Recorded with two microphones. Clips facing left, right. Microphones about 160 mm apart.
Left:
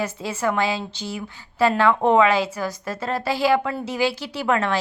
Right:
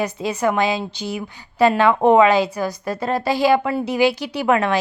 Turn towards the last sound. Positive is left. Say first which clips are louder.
# right 4 dB
turn(degrees=-15)  # may be behind; listen again after turning